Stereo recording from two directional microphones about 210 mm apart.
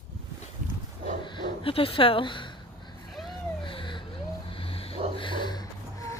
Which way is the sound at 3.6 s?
25° left (ahead or behind).